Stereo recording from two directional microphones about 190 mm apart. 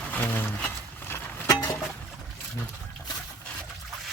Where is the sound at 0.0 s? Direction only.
10° left (ahead or behind).